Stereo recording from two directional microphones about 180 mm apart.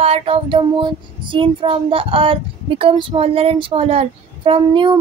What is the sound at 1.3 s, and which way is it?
Child singing, 30° right (ahead or behind).